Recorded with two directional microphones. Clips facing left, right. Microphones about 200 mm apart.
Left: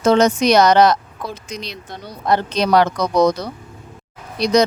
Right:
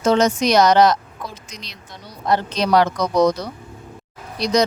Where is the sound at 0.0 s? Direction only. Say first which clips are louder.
Left 3 dB; 60° left (ahead or behind).